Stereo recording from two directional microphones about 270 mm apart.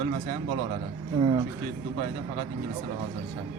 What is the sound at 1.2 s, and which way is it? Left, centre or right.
Speech, centre.